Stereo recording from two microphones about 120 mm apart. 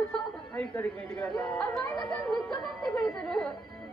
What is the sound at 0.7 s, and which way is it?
Speech, 20° left (ahead or behind).